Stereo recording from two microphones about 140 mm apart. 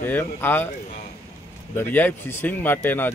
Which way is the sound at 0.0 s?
15° left (ahead or behind).